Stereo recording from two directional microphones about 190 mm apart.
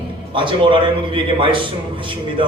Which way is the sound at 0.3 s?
25° right (ahead or behind).